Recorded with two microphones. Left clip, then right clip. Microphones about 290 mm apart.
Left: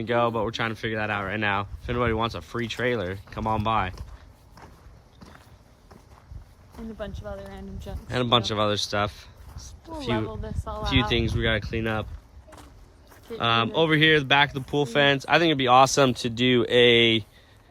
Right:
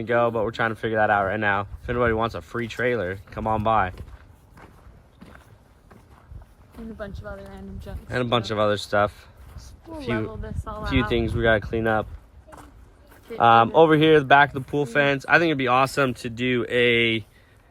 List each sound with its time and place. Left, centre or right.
0.0 s speech: centre
7.0 s speech: left
8.0 s speech: centre
10.3 s speech: centre
10.8 s speech: centre
13.4 s speech: centre